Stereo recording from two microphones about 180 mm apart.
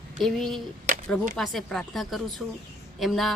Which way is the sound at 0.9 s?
50° right (ahead or behind).